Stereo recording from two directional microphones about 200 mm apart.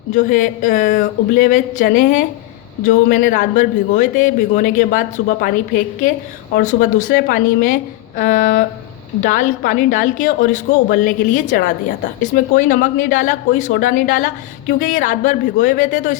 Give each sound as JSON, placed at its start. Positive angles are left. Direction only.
{"t": 0.1, "sound": "a man's voice", "side_deg": 40}